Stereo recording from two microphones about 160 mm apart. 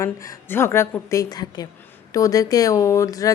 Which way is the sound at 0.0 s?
15° left (ahead or behind).